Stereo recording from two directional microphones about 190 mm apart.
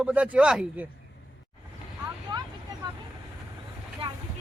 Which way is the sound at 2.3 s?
25° right (ahead or behind).